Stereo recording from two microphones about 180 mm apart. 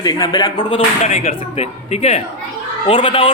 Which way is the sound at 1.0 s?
35° left (ahead or behind).